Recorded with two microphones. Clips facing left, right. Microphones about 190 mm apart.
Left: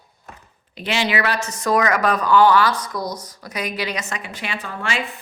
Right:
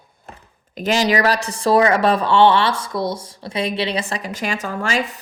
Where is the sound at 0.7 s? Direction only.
40° right (ahead or behind).